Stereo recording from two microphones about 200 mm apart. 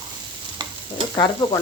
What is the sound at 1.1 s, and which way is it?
Stir, 15° left (ahead or behind).